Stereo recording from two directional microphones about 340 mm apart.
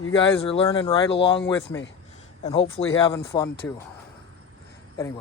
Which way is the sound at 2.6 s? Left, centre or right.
Left.